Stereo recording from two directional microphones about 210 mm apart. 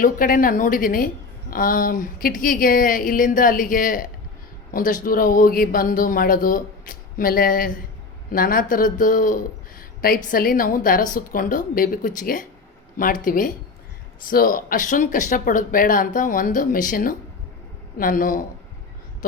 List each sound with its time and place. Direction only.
0.0 s speech: 40° left (ahead or behind)